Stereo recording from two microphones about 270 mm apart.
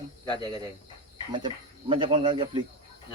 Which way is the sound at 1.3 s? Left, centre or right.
Centre.